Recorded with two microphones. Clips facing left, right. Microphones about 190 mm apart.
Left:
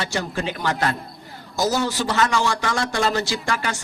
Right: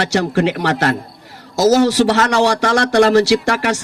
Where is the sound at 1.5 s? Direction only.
85° right.